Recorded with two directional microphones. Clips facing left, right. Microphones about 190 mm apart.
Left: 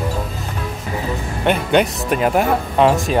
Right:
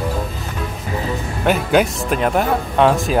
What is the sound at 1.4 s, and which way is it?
Speech, 5° right (ahead or behind).